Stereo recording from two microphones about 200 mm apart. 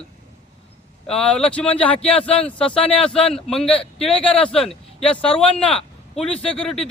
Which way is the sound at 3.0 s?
5° left (ahead or behind).